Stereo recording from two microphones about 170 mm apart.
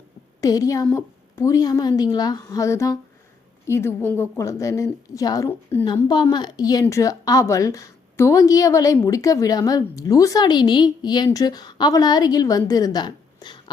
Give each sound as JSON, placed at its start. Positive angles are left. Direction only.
{"t": 0.4, "sound": "a woman's voice", "side_deg": 20}